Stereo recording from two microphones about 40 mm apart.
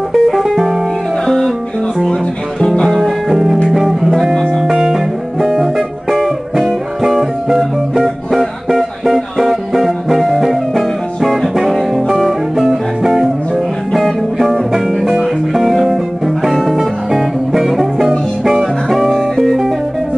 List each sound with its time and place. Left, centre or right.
0.1 s music: centre
1.2 s music: centre
2.6 s music: left
2.9 s music: centre
7.0 s music: centre
8.0 s music: centre
18.9 s music: centre